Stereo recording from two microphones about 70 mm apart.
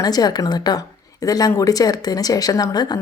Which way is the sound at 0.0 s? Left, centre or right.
Left.